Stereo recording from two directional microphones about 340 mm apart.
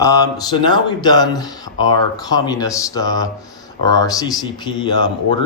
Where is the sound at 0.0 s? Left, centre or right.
Centre.